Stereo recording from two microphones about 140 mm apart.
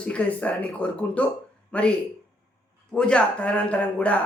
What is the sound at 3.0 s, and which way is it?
Speech, 5° left (ahead or behind).